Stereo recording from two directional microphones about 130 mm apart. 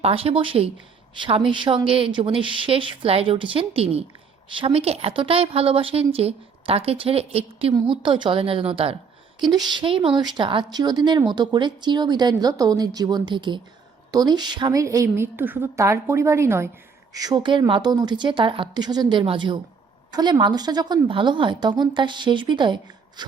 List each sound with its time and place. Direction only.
0.0 s a woman's voice: 50° right (ahead or behind)
7.7 s a woman's voice: 40° right (ahead or behind)
9.5 s a woman's voice: 35° right (ahead or behind)
17.2 s a woman's voice: 30° right (ahead or behind)